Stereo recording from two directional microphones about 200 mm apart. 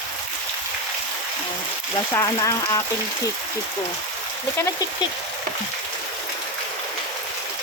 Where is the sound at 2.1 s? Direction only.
15° left (ahead or behind).